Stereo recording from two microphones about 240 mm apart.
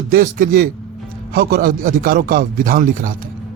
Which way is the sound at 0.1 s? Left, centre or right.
Right.